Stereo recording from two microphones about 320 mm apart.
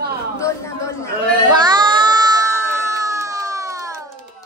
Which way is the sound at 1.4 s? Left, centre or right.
Centre.